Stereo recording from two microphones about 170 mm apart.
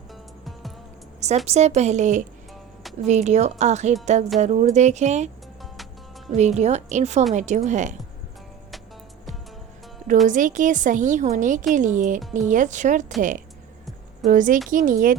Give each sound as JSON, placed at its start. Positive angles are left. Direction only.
{"t": 0.1, "sound": "music", "side_deg": 0}
{"t": 1.5, "sound": "a woman's voice", "side_deg": -40}
{"t": 5.7, "sound": "music", "side_deg": 0}
{"t": 6.3, "sound": "a woman's voice", "side_deg": -40}
{"t": 10.2, "sound": "a woman's voice", "side_deg": -50}
{"t": 14.3, "sound": "a woman's voice", "side_deg": -50}